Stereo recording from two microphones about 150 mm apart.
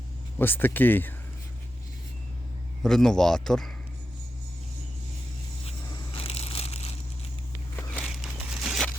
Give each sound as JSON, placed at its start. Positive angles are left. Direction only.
{"t": 0.3, "sound": "speech", "side_deg": 15}
{"t": 2.8, "sound": "speech", "side_deg": 5}
{"t": 6.1, "sound": "crushing", "side_deg": 40}
{"t": 7.8, "sound": "a sound", "side_deg": 10}